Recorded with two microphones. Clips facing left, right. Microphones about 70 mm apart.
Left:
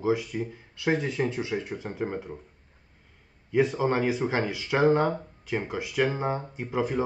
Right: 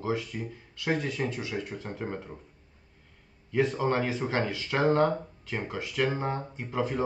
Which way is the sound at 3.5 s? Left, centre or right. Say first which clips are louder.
Left 2 dB; centre.